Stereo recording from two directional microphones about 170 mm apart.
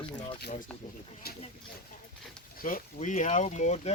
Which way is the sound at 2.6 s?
55° left (ahead or behind).